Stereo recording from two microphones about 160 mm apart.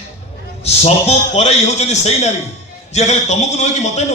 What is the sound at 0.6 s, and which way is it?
A man's voice, 40° left (ahead or behind).